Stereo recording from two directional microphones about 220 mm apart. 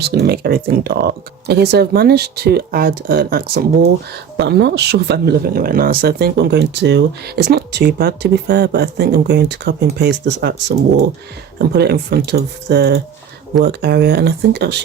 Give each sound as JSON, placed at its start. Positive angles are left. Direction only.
{"t": 0.0, "sound": "speech", "side_deg": -45}